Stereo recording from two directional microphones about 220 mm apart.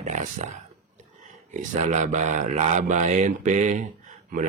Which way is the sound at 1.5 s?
35° right (ahead or behind).